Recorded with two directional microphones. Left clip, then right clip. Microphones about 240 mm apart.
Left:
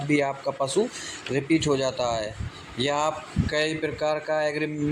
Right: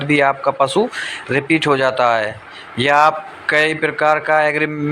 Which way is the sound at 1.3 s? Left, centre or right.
Centre.